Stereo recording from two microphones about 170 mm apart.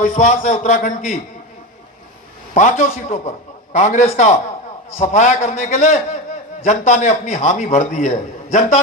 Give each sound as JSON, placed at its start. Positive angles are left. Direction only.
{"t": 0.0, "sound": "a man's voice", "side_deg": 45}
{"t": 2.6, "sound": "a man's voice", "side_deg": 50}